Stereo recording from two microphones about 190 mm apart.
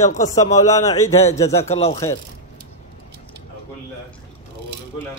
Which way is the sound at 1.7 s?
30° left (ahead or behind).